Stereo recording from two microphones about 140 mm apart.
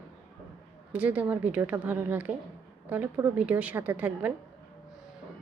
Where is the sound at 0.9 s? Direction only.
10° right (ahead or behind).